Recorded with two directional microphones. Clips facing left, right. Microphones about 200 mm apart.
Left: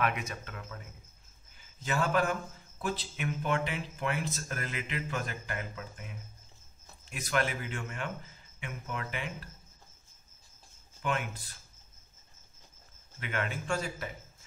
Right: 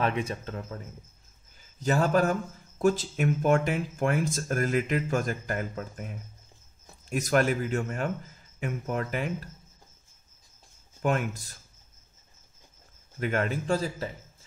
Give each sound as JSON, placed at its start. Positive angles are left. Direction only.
{"t": 0.0, "sound": "a man's voice", "side_deg": -30}
{"t": 1.8, "sound": "a man's voice", "side_deg": -40}
{"t": 11.0, "sound": "speech", "side_deg": -45}
{"t": 13.2, "sound": "a man's voice", "side_deg": -40}